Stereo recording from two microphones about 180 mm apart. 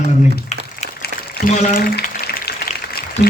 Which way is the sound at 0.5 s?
40° left (ahead or behind).